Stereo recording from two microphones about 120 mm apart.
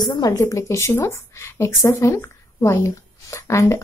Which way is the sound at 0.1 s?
25° left (ahead or behind).